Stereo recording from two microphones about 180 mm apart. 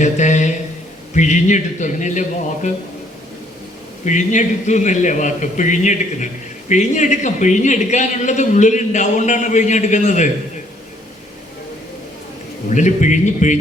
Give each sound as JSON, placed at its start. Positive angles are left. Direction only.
{"t": 0.0, "sound": "a man's voice", "side_deg": 45}
{"t": 4.0, "sound": "a man's voice", "side_deg": 45}
{"t": 12.7, "sound": "a man's voice", "side_deg": 45}